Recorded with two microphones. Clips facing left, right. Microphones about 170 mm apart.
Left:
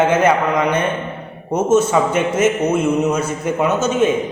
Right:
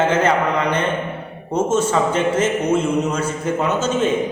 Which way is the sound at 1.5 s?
10° left (ahead or behind).